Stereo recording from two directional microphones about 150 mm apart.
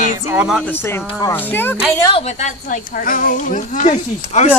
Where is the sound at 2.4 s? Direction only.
60° left (ahead or behind).